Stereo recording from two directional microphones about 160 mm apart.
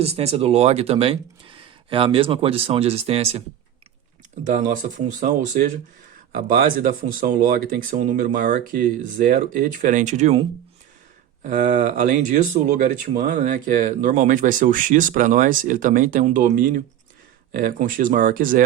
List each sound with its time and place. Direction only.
0.0 s speech: 40° right (ahead or behind)
4.4 s speech: 55° right (ahead or behind)
6.3 s speech: 65° right (ahead or behind); by 10.3 s 45° right (ahead or behind)
11.4 s speech: 50° right (ahead or behind)
17.5 s speech: 70° right (ahead or behind)